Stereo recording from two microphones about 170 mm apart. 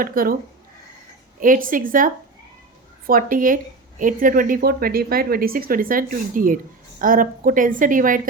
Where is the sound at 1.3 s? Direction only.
50° right (ahead or behind).